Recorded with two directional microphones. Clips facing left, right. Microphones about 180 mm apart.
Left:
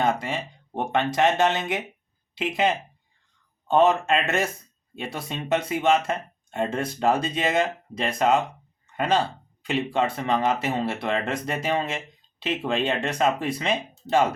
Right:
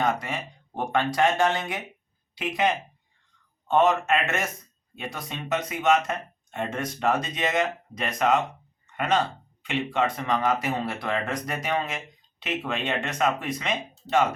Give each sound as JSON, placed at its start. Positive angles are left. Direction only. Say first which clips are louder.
{"t": 0.0, "sound": "speech", "louder": "left 2 dB", "side_deg": 25}